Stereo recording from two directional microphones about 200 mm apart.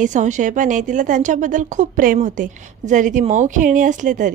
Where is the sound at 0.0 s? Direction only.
35° right (ahead or behind).